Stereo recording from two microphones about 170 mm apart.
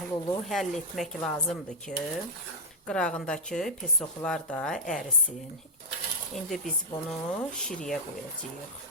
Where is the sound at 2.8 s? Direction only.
5° left (ahead or behind).